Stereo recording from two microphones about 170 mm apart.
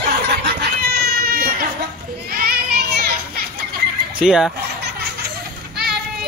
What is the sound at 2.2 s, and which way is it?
Children playing, 60° right (ahead or behind).